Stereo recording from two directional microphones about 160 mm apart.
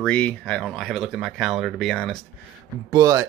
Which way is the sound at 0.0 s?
10° left (ahead or behind).